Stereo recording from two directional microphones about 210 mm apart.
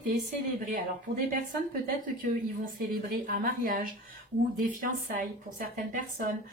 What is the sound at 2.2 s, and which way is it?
A woman's voice, 40° right (ahead or behind).